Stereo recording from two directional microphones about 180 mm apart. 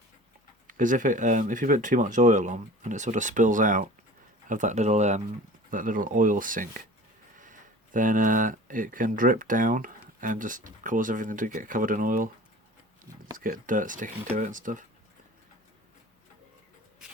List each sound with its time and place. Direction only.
0.7 s speech: 45° right (ahead or behind)
13.3 s speech: 50° right (ahead or behind)